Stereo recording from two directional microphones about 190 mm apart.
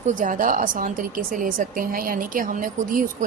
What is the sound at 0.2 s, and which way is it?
A woman's voice, 45° right (ahead or behind).